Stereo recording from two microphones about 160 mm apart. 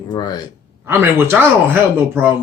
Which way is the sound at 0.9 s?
15° right (ahead or behind).